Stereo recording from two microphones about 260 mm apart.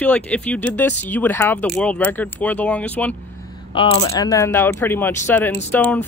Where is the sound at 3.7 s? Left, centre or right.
Left.